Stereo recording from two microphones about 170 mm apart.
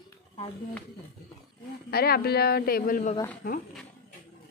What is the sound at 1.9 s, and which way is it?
Speech, 65° left (ahead or behind).